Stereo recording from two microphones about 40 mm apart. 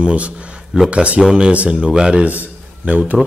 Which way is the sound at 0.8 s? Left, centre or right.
Right.